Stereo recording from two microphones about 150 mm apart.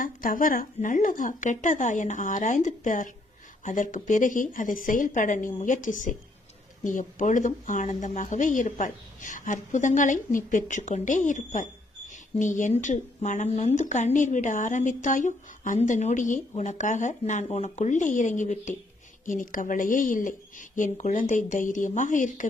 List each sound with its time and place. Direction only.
0.0 s speech: 65° left (ahead or behind)